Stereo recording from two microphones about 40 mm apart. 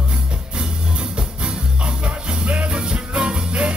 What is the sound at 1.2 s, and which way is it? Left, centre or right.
Music, right.